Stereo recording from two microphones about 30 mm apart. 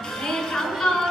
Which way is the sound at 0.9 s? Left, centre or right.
Left.